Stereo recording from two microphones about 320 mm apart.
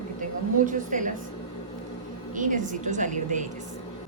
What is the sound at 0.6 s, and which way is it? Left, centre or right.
Speech, right.